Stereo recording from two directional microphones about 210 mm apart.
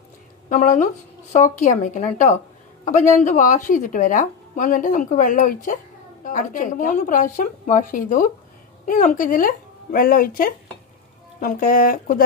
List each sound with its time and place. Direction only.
0.5 s a woman's voice: 35° left (ahead or behind)